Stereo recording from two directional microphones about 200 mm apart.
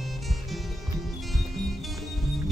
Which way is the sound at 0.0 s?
Centre (ahead or behind).